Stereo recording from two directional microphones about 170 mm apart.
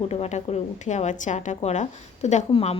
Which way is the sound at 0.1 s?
40° left (ahead or behind).